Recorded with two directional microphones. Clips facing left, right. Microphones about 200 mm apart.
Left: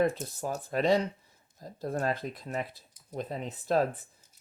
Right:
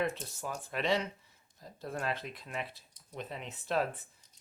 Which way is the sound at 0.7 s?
40° left (ahead or behind).